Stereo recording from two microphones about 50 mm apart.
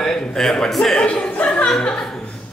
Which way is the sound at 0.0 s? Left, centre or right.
Centre.